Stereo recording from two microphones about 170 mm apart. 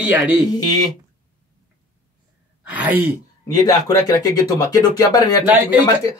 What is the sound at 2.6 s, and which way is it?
Speech, 10° right (ahead or behind).